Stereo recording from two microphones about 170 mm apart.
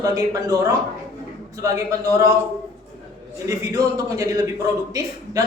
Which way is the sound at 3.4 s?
20° right (ahead or behind).